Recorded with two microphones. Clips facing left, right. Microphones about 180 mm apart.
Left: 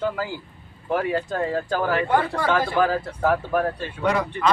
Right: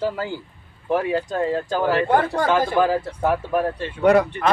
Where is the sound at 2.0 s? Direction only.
45° right (ahead or behind).